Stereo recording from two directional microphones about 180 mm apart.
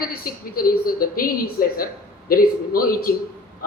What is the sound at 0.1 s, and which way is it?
A man's voice, 55° left (ahead or behind).